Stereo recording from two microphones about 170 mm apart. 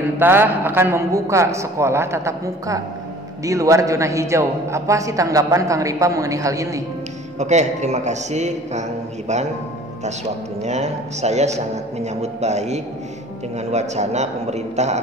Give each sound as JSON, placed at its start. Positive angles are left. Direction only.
{"t": 0.2, "sound": "a man's voice", "side_deg": -10}
{"t": 7.3, "sound": "a man's voice", "side_deg": -45}
{"t": 10.6, "sound": "a man's voice", "side_deg": -40}